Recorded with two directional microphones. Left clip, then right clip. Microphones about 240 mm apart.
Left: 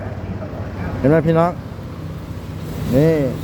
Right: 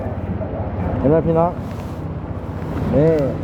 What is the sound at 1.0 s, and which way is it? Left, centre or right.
Speech, left.